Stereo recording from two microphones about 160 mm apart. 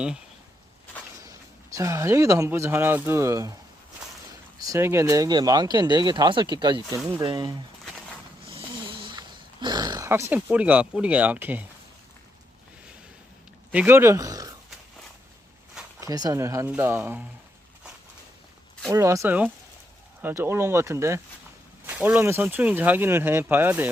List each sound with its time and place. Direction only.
1.2 s speech: 20° right (ahead or behind)
4.6 s speech: 20° right (ahead or behind)
8.4 s a sound: 35° right (ahead or behind); by 11.6 s 10° right (ahead or behind)
13.7 s speech: 15° right (ahead or behind)
16.0 s speech: 25° right (ahead or behind)
18.9 s speech: 20° right (ahead or behind)